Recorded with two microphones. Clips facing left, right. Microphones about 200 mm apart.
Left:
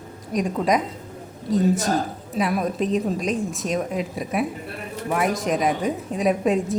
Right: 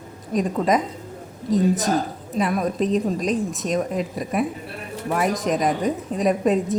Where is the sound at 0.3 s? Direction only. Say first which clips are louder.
Right 1 dB; centre (ahead or behind).